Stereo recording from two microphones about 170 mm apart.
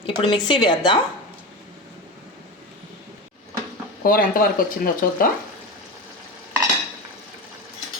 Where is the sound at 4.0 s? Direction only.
55° left (ahead or behind).